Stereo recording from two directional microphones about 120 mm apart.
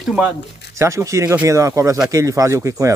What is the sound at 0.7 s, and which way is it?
Speech, 25° right (ahead or behind).